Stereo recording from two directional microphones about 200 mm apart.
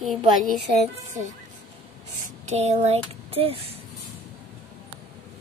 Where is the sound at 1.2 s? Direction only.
35° right (ahead or behind).